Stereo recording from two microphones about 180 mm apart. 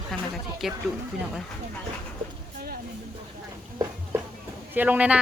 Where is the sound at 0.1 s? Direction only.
Centre (ahead or behind).